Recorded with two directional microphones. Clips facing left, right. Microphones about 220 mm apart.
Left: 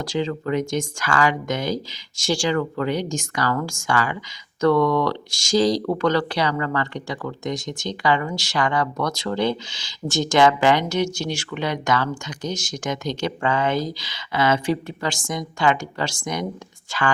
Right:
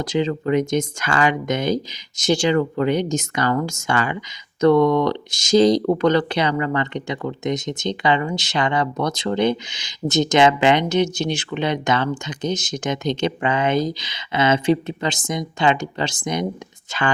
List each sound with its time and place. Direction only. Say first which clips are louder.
0.0 s speech: right 3 dB; 20° right (ahead or behind)